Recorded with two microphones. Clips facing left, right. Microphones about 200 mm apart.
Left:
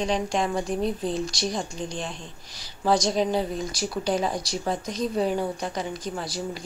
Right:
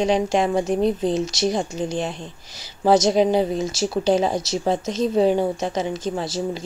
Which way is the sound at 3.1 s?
30° right (ahead or behind).